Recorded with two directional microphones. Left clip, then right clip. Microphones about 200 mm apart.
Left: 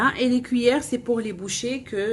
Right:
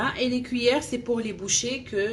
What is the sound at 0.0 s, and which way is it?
A woman's voice, 40° left (ahead or behind).